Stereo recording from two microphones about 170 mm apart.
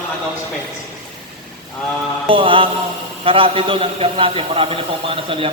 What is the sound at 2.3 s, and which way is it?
A man's voice, 30° right (ahead or behind).